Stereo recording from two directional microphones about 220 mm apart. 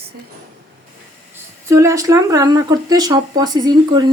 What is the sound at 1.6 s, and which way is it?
Speech, 15° right (ahead or behind).